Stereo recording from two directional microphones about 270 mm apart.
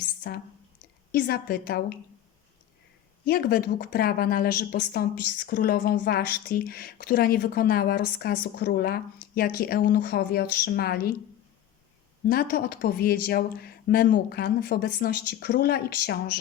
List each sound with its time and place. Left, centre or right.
1.1 s speech: left
3.2 s speech: left
12.3 s speech: left